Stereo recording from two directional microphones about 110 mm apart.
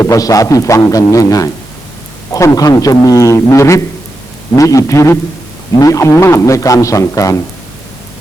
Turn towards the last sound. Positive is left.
turn(degrees=30)  # may be behind; listen again after turning